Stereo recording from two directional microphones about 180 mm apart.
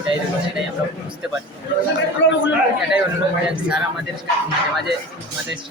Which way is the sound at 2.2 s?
90° left.